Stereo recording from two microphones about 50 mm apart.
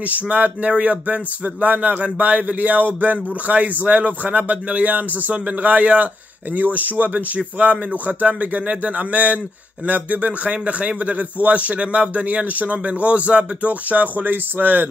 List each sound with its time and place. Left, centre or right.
0.1 s a man's voice: right